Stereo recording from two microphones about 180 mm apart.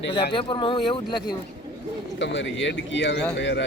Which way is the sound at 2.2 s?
90° left.